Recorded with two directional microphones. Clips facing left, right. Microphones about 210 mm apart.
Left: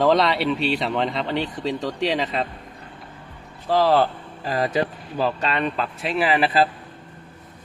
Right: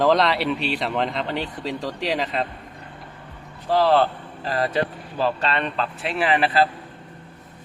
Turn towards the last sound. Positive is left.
turn(degrees=5)  # may be behind; listen again after turning